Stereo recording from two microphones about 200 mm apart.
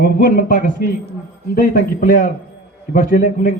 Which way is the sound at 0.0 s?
45° left (ahead or behind).